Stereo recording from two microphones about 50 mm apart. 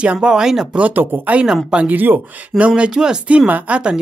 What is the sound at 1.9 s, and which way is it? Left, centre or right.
Speech, right.